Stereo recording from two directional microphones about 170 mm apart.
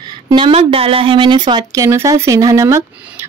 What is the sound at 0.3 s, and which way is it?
A woman's voice, 30° right (ahead or behind).